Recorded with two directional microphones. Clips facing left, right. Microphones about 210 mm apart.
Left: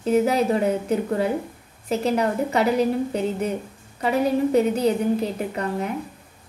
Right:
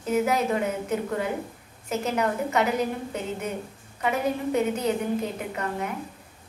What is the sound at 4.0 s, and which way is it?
Speech, 35° left (ahead or behind).